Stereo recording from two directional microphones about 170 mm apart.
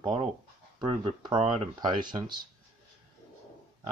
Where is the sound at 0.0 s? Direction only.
25° right (ahead or behind).